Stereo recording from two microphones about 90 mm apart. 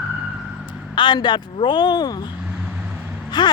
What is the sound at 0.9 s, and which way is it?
Speech, 60° left (ahead or behind).